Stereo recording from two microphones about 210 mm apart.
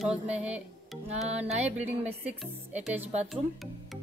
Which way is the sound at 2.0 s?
10° right (ahead or behind).